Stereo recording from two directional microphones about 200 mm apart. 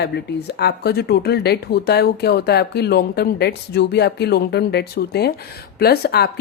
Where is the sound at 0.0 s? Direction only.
55° left (ahead or behind).